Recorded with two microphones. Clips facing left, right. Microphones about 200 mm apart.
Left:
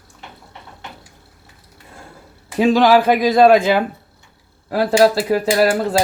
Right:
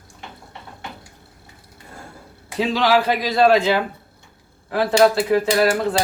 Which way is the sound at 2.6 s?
50° left (ahead or behind).